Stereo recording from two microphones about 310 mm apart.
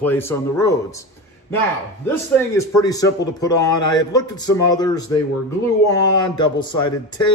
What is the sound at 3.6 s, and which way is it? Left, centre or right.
Mantra, left.